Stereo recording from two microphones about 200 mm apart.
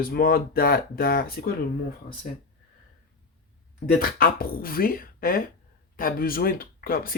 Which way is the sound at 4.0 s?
45° left (ahead or behind).